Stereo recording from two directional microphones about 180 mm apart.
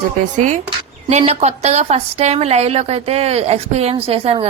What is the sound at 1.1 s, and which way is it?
A woman's voice, 40° right (ahead or behind).